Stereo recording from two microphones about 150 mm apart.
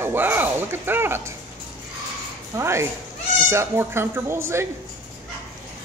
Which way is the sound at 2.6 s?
20° right (ahead or behind).